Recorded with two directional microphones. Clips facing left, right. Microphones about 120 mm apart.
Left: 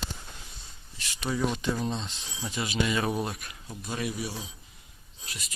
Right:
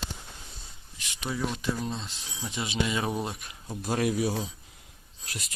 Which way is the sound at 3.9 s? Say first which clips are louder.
Right 7 dB; 90° right.